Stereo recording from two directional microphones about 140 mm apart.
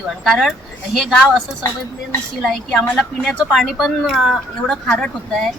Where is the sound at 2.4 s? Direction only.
5° left (ahead or behind).